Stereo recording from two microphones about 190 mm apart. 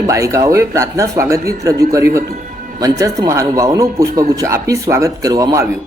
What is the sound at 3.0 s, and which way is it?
A man's voice, 15° right (ahead or behind).